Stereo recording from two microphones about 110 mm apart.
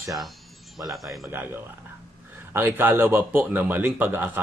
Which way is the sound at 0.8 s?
Centre (ahead or behind).